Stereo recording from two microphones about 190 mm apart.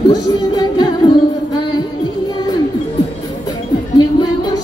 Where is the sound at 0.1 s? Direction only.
20° left (ahead or behind).